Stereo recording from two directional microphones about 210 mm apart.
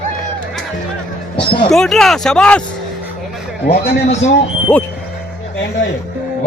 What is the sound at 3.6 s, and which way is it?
Speech, 35° left (ahead or behind).